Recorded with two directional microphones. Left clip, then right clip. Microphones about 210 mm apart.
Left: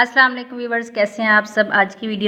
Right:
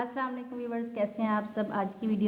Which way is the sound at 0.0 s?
40° left (ahead or behind).